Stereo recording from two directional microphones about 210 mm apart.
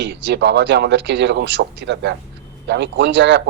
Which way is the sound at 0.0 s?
55° right (ahead or behind).